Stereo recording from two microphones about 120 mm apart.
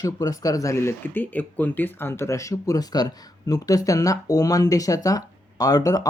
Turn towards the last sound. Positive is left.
turn(degrees=30)  # may be behind; listen again after turning